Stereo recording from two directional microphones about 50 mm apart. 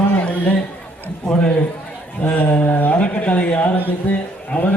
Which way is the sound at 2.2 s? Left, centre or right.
Left.